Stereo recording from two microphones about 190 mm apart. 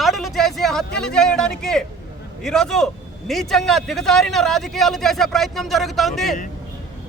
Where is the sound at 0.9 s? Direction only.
5° left (ahead or behind).